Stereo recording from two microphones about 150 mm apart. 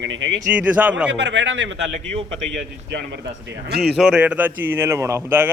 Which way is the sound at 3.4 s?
90° right.